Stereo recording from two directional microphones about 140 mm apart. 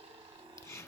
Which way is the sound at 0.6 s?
20° left (ahead or behind).